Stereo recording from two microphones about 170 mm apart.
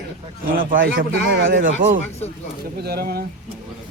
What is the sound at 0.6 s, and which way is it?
A man's voice, 55° right (ahead or behind).